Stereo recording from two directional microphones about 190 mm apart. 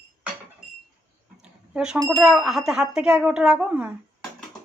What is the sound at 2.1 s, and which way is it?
Speech, 5° right (ahead or behind).